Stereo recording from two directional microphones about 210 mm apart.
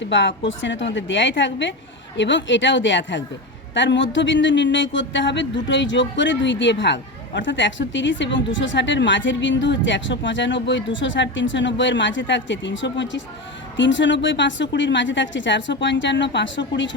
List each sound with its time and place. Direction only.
0.0 s speech: 60° left (ahead or behind)